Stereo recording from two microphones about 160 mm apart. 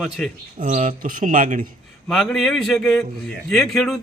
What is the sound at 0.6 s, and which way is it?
Speech, 60° right (ahead or behind).